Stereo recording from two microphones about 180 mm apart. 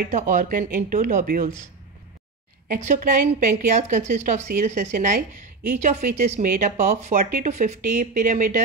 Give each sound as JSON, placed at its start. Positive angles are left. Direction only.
{"t": 0.0, "sound": "speech", "side_deg": -45}
{"t": 2.7, "sound": "speech", "side_deg": -45}